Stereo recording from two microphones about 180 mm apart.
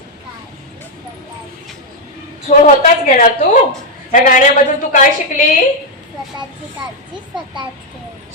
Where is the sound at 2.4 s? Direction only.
45° left (ahead or behind).